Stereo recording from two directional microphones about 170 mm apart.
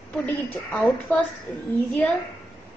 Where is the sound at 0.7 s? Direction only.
10° left (ahead or behind).